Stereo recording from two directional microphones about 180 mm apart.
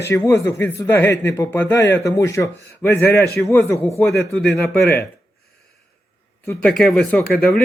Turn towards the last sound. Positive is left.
turn(degrees=5)  # may be behind; listen again after turning